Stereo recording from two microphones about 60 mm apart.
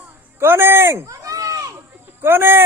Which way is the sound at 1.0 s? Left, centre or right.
Right.